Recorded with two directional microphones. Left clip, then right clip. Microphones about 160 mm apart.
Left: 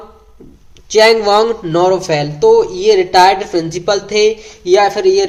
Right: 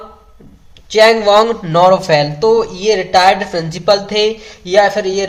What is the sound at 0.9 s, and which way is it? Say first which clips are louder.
A man's voice: even; 40° left (ahead or behind).